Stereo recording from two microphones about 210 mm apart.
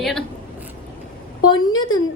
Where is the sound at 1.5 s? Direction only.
20° left (ahead or behind).